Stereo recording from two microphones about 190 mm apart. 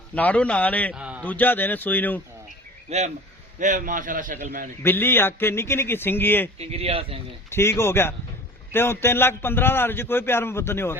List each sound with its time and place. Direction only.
0.1 s a man's voice: 10° left (ahead or behind)
0.9 s a sound: 5° right (ahead or behind)
1.2 s a man's voice: 10° left (ahead or behind)
2.9 s a man's voice: 35° right (ahead or behind)
4.8 s a man's voice: 10° left (ahead or behind)
6.6 s speech: 35° right (ahead or behind)
7.5 s a man's voice: 15° left (ahead or behind)